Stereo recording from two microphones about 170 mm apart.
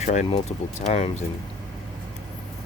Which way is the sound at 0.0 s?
45° left (ahead or behind).